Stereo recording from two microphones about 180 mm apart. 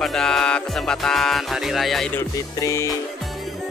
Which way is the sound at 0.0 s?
Centre (ahead or behind).